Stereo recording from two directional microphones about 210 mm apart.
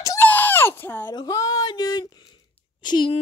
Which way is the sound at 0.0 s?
10° left (ahead or behind).